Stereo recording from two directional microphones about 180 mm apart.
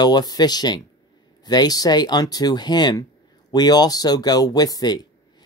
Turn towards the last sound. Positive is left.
turn(degrees=20)  # may be behind; listen again after turning